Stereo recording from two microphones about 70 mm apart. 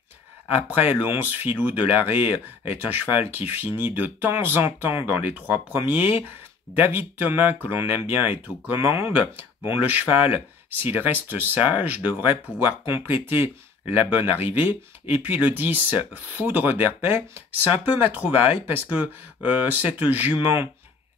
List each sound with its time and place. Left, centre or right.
0.5 s speech: right